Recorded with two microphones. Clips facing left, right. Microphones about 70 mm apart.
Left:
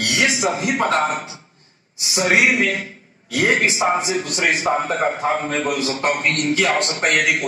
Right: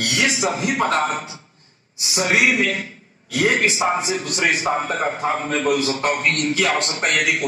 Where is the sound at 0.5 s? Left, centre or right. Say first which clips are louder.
Left 1 dB; left.